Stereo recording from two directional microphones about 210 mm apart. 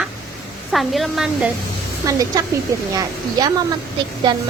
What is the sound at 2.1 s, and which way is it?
Speech, 15° right (ahead or behind).